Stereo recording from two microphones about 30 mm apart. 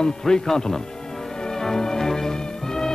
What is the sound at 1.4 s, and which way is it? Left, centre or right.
Music, centre.